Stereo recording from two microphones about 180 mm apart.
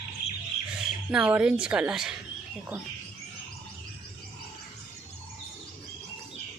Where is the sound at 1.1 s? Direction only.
5° right (ahead or behind).